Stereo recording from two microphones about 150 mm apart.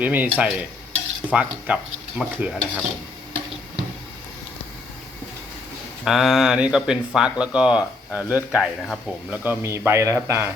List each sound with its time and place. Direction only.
0.0 s speech: 10° right (ahead or behind)
6.1 s speech: centre (ahead or behind)
9.3 s speech: 10° right (ahead or behind)